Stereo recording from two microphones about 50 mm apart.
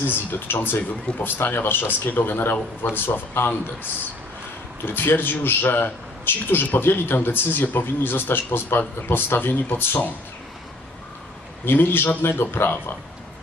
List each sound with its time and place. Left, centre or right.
0.1 s a man's voice: left
4.9 s a man's voice: left
11.6 s a man's voice: left